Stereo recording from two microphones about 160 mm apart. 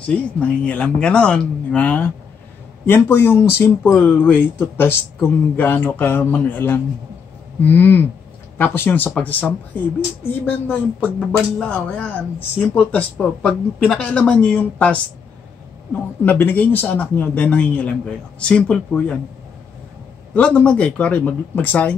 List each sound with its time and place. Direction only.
0.0 s speech: 5° left (ahead or behind)
16.3 s speech: 10° left (ahead or behind)
20.3 s speech: 5° left (ahead or behind)